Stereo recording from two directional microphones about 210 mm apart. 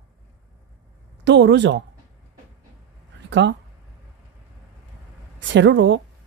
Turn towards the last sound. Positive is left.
turn(degrees=-60)  # may be behind; listen again after turning